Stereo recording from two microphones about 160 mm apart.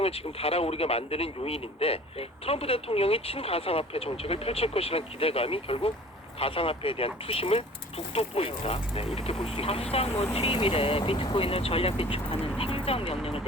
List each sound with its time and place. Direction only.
0.0 s speech: 40° left (ahead or behind)